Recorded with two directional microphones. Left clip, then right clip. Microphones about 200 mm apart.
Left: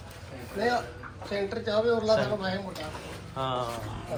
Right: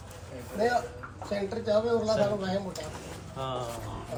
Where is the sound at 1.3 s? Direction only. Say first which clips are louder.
Right 1 dB; 50° right (ahead or behind).